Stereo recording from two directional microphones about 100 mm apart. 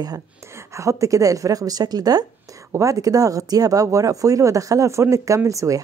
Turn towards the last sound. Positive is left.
turn(degrees=-35)  # may be behind; listen again after turning